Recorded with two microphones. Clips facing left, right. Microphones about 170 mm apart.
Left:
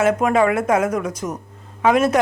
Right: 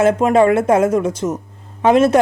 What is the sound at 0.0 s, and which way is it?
A woman's voice, 25° right (ahead or behind).